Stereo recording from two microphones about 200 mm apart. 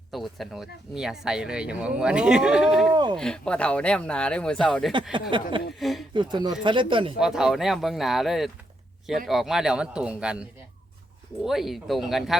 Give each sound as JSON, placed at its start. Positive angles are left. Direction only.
{"t": 0.1, "sound": "speech", "side_deg": 0}
{"t": 2.9, "sound": "speech", "side_deg": -20}
{"t": 3.2, "sound": "speech", "side_deg": 5}
{"t": 5.3, "sound": "speech", "side_deg": -25}
{"t": 5.8, "sound": "speech", "side_deg": 0}
{"t": 6.1, "sound": "speech", "side_deg": -20}
{"t": 7.2, "sound": "speech", "side_deg": -5}
{"t": 11.4, "sound": "speech", "side_deg": 0}